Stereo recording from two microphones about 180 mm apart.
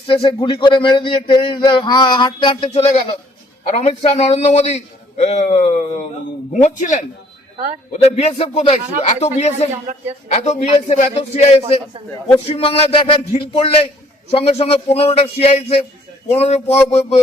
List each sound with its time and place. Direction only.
0.1 s a man's voice: 30° left (ahead or behind)